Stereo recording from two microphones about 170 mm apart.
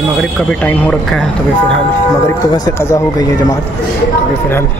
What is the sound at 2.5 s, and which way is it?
Speech, 20° left (ahead or behind).